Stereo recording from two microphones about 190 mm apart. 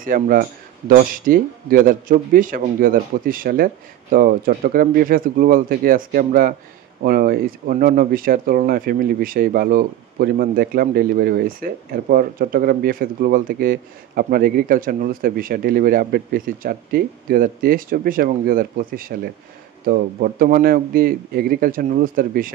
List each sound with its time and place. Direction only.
0.0 s speech: 45° right (ahead or behind)